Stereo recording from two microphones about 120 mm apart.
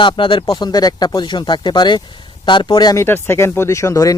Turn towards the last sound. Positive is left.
turn(degrees=25)  # may be behind; listen again after turning